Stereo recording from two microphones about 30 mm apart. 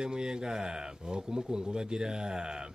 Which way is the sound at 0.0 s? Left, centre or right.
Right.